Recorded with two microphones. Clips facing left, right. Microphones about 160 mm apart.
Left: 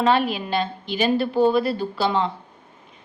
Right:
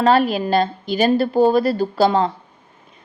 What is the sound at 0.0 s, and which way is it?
Speech, 40° right (ahead or behind).